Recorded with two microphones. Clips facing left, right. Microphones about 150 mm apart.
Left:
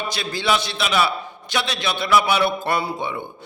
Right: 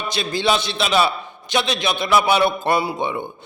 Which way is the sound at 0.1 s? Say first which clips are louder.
Right 4 dB; 20° right (ahead or behind).